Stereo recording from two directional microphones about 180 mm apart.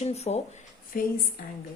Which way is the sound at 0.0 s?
35° left (ahead or behind).